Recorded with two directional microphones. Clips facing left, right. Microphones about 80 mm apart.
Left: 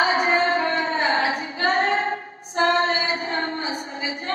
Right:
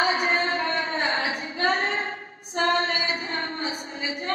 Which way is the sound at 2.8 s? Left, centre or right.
Left.